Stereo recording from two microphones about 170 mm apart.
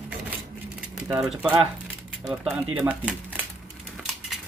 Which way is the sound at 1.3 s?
5° right (ahead or behind).